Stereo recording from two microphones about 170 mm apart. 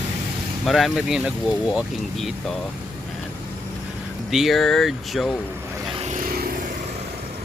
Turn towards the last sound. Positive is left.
turn(degrees=-60)  # may be behind; listen again after turning